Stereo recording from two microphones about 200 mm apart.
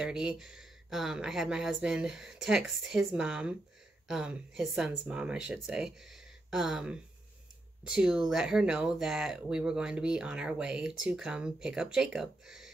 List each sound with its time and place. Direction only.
0.0 s speech: 5° right (ahead or behind)